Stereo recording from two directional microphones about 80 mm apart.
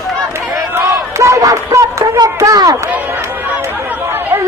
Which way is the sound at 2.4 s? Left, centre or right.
Right.